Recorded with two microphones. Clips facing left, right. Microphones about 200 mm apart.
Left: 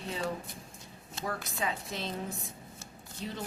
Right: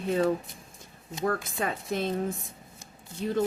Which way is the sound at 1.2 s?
55° right (ahead or behind).